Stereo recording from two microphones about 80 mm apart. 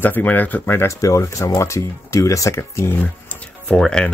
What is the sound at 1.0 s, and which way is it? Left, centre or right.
Speech, left.